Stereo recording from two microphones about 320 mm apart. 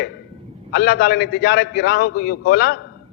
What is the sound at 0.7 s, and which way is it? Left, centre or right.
A man's voice, left.